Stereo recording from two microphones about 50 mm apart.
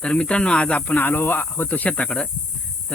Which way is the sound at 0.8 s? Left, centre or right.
Left.